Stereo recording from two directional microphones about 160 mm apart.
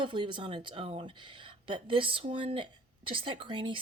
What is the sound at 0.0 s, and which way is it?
Speech, 30° right (ahead or behind).